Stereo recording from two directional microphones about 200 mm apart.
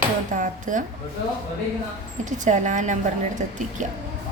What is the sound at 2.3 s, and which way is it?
Speech, 40° right (ahead or behind).